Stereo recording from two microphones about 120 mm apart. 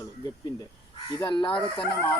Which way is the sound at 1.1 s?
40° left (ahead or behind).